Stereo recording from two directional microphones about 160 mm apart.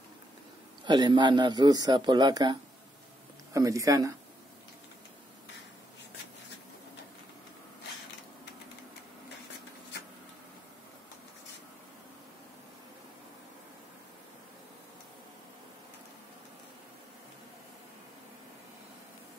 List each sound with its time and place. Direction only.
0.8 s speech: 25° right (ahead or behind)
3.5 s speech: 20° right (ahead or behind)